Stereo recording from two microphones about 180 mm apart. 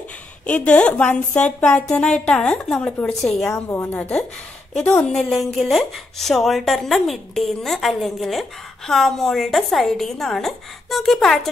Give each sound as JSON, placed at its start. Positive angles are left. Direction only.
{"t": 0.5, "sound": "a woman's voice", "side_deg": 5}